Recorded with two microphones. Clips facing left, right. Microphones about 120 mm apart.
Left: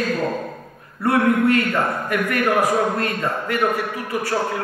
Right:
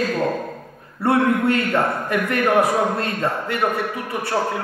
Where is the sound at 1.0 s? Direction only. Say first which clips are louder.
Even; 25° right (ahead or behind).